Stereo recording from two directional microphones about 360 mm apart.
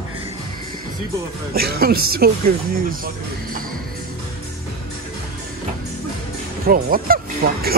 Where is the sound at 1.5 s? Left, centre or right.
Right.